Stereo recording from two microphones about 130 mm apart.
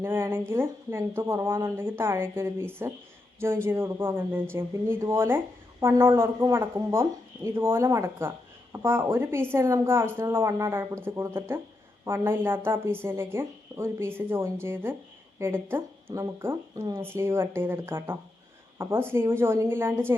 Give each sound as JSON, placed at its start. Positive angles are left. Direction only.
{"t": 0.0, "sound": "a woman's voice", "side_deg": -20}